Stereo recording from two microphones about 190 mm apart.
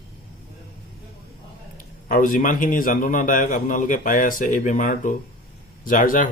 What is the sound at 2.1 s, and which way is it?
A man's voice, 45° left (ahead or behind).